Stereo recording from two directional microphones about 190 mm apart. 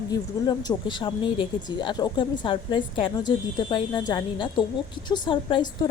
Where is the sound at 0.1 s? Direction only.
20° left (ahead or behind).